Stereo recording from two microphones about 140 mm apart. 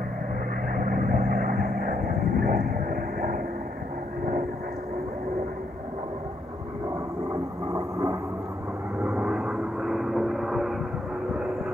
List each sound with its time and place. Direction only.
0.7 s vehicle: 85° right
7.7 s vehicle: 25° right (ahead or behind)
9.0 s vehicle: 5° right (ahead or behind)